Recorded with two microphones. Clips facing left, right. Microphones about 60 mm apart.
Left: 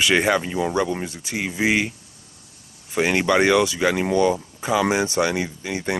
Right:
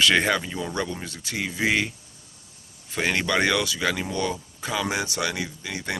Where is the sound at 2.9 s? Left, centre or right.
Centre.